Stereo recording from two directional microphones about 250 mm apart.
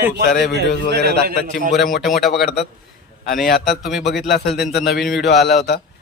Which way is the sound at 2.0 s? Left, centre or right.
Centre.